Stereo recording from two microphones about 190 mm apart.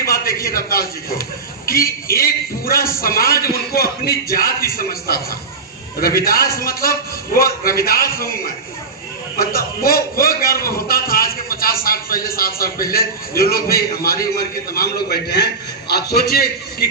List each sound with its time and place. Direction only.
0.1 s a sound: 50° left (ahead or behind)
1.6 s a man's voice: 50° left (ahead or behind)
9.4 s a man's voice: 50° left (ahead or behind)